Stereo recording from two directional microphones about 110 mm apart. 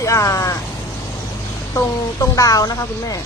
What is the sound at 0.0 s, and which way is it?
Speech, 30° left (ahead or behind).